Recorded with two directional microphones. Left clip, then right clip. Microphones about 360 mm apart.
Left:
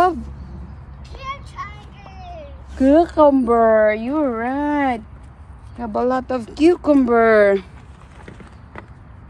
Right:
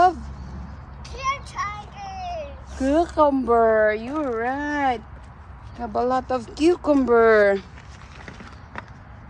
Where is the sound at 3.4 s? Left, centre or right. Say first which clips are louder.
Left 4 dB; left.